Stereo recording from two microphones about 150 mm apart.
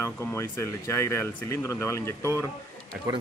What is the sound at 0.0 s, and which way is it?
Speech, 15° left (ahead or behind).